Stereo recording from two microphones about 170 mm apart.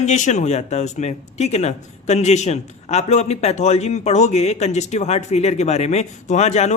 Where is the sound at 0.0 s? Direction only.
45° left (ahead or behind).